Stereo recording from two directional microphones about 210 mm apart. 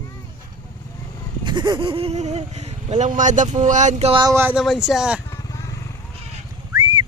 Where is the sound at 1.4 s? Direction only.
20° right (ahead or behind); by 5.2 s 5° right (ahead or behind).